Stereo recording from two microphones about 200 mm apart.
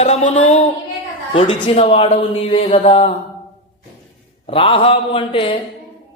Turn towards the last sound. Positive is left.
turn(degrees=25)  # may be behind; listen again after turning